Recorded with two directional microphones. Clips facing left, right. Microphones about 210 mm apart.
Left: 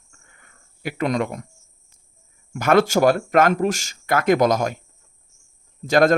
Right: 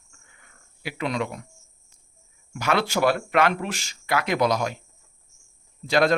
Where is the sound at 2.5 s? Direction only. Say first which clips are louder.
Left 7 dB; 50° left (ahead or behind).